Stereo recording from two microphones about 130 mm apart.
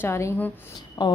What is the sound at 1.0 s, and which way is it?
Speech, 30° left (ahead or behind).